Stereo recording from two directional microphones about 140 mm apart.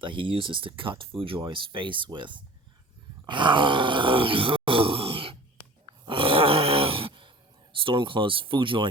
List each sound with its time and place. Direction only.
0.0 s speech: 35° right (ahead or behind)
3.2 s groan: 35° right (ahead or behind)